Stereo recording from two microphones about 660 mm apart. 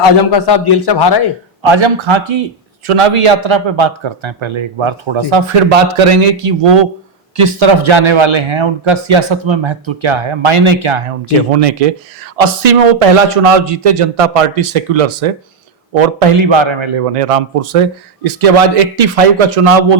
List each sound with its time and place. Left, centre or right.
0.3 s a man's voice: left
1.7 s a man's voice: right
11.5 s a man's voice: right
16.0 s a man's voice: right